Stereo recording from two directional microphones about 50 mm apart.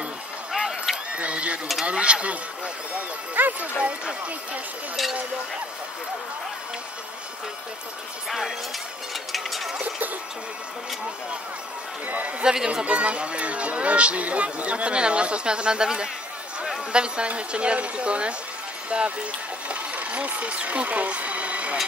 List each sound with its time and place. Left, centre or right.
0.5 s a sound: centre
1.1 s a sound: right
1.9 s speech: right
9.1 s speech: centre
9.8 s speech: right
12.1 s speech: right
12.4 s speech: centre
12.8 s speech: right